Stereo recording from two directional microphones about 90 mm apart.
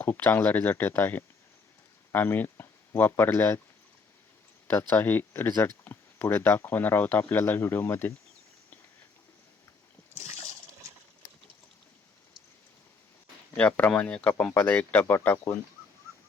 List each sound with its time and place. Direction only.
0.0 s speech: 20° left (ahead or behind)
4.7 s speech: 25° left (ahead or behind)
13.6 s speech: 20° left (ahead or behind)